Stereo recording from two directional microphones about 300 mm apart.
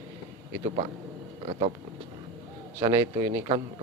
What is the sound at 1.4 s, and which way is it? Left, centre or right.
Speech, centre.